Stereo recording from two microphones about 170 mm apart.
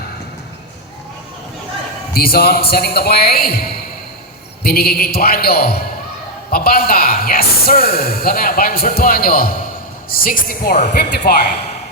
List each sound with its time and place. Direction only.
2.1 s speech: 65° left (ahead or behind)